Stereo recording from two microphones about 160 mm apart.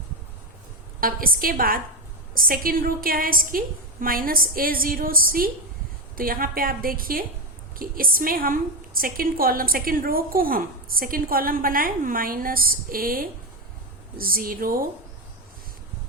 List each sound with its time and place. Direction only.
1.0 s a woman's voice: 65° right (ahead or behind)